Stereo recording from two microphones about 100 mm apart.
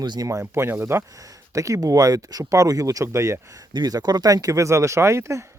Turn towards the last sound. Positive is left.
turn(degrees=-30)  # may be behind; listen again after turning